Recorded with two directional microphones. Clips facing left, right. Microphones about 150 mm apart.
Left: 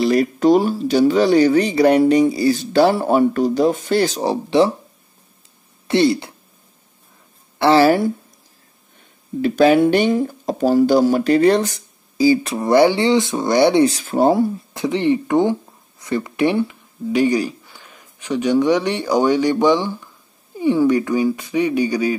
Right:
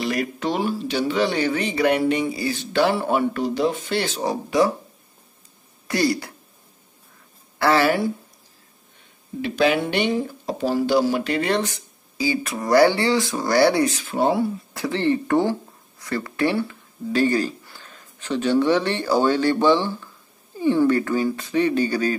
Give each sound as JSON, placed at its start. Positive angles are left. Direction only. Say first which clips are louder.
{"t": 0.0, "sound": "speech", "louder": "left 9 dB", "side_deg": 35}
{"t": 5.9, "sound": "speech", "louder": "left 6 dB", "side_deg": 25}
{"t": 7.5, "sound": "a woman's voice", "louder": "left 6 dB", "side_deg": 25}
{"t": 9.4, "sound": "speech", "louder": "left 7 dB", "side_deg": 45}
{"t": 13.8, "sound": "speech", "louder": "left 6 dB", "side_deg": 40}
{"t": 14.7, "sound": "speech", "louder": "left 4 dB", "side_deg": 20}